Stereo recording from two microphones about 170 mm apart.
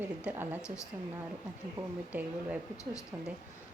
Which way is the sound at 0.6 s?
20° left (ahead or behind).